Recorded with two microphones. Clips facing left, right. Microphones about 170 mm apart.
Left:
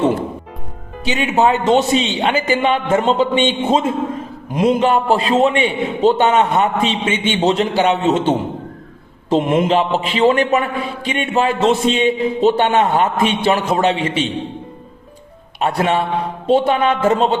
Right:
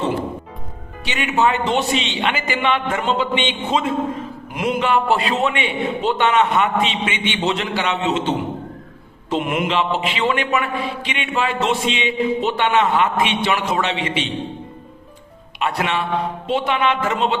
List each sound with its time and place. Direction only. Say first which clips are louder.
1.1 s a man's voice: left 3 dB; 30° left (ahead or behind)
15.6 s a man's voice: left 5 dB; 45° left (ahead or behind)